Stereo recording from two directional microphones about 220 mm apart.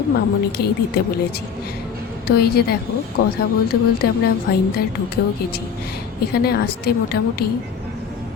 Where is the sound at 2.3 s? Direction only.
45° left (ahead or behind).